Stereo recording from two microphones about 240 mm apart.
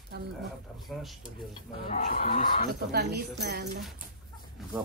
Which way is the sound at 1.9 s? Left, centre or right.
Left.